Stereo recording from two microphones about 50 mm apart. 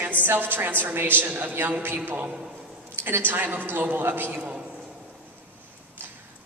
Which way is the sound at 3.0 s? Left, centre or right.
Right.